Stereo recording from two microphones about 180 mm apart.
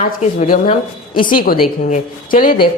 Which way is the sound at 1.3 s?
50° left (ahead or behind).